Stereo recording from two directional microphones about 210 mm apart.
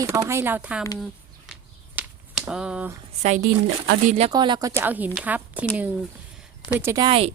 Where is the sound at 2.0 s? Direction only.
5° right (ahead or behind).